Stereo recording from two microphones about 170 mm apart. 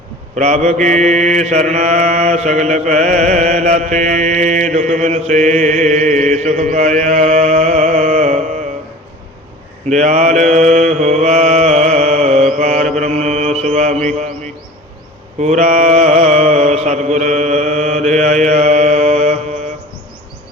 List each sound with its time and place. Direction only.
0.3 s mantra: 45° right (ahead or behind)
9.9 s mantra: 45° right (ahead or behind)
15.4 s mantra: 40° right (ahead or behind)